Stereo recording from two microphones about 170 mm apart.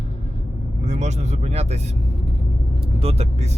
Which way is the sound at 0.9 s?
40° right (ahead or behind).